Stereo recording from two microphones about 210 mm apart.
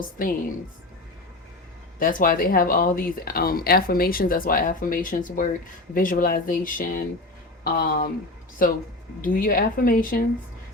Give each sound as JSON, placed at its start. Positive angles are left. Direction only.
{"t": 0.2, "sound": "speech", "side_deg": 40}
{"t": 2.0, "sound": "speech", "side_deg": 40}
{"t": 9.2, "sound": "speech", "side_deg": 45}